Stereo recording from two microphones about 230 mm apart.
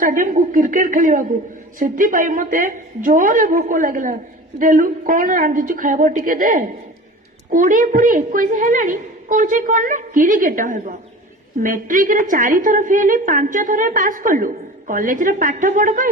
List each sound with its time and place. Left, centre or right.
0.0 s a woman's voice: right